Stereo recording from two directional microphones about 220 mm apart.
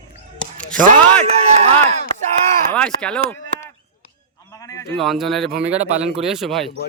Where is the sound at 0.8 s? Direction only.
30° right (ahead or behind).